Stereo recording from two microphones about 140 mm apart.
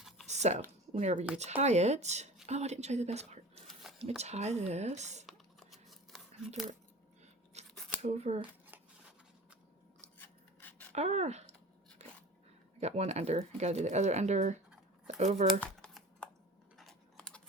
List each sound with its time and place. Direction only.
0.3 s speech: 55° right (ahead or behind)
3.9 s a sound: 5° right (ahead or behind)
4.2 s speech: 50° right (ahead or behind)
5.2 s a sound: centre (ahead or behind)
7.5 s scissors: 50° right (ahead or behind)
8.0 s speech: 50° right (ahead or behind)
8.4 s shuffling cards: 10° right (ahead or behind)
10.2 s rub: 15° left (ahead or behind)
10.9 s speech: 50° right (ahead or behind)
12.8 s speech: 50° right (ahead or behind)
15.8 s typing: 5° left (ahead or behind)
16.7 s computer keyboard: 5° left (ahead or behind)